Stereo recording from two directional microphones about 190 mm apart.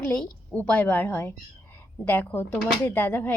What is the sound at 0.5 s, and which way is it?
Speech, 5° left (ahead or behind).